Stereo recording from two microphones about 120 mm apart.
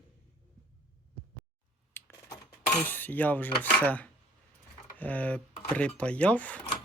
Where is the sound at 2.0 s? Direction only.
20° left (ahead or behind).